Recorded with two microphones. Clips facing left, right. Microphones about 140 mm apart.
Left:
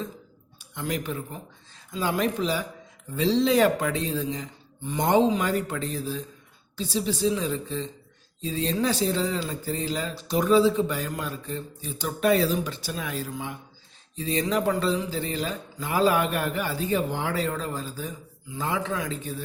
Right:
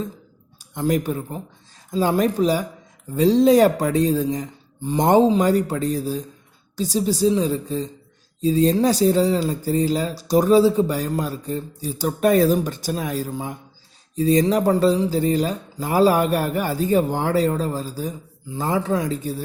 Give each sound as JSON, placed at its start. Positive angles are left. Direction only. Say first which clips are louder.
{"t": 0.6, "sound": "a man's voice", "louder": "right 9 dB", "side_deg": -40}